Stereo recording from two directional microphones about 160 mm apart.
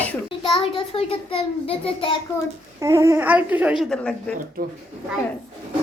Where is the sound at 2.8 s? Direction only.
20° right (ahead or behind).